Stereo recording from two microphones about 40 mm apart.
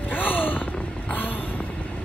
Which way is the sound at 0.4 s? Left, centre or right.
Left.